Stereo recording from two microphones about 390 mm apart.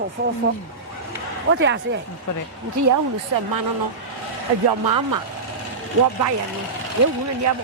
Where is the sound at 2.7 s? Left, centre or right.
Right.